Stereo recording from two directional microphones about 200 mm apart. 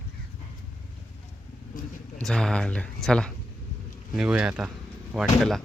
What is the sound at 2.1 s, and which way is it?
Speech, 5° left (ahead or behind).